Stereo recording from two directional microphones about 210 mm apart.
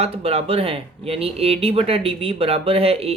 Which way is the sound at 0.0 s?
30° right (ahead or behind).